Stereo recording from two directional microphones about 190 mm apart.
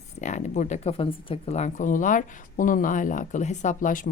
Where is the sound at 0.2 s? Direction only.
40° left (ahead or behind).